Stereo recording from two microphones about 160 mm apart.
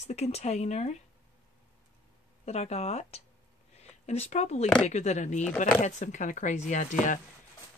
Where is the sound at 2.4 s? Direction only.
40° left (ahead or behind).